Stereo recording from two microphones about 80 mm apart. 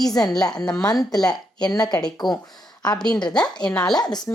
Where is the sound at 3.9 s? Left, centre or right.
Left.